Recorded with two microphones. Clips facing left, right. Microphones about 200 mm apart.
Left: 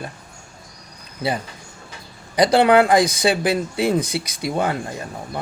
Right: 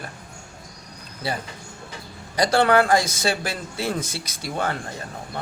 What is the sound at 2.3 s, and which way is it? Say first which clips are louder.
Speech: left 4 dB; 20° left (ahead or behind).